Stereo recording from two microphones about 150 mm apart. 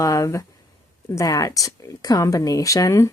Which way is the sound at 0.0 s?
20° left (ahead or behind).